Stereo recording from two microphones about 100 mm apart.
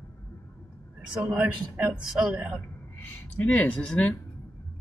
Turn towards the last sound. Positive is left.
turn(degrees=15)  # may be behind; listen again after turning